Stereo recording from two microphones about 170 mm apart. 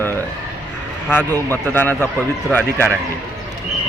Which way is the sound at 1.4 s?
10° left (ahead or behind).